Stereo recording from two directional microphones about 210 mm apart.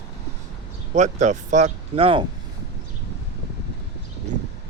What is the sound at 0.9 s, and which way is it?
Speech, 35° right (ahead or behind).